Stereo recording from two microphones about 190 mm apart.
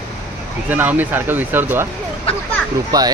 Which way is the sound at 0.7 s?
10° right (ahead or behind).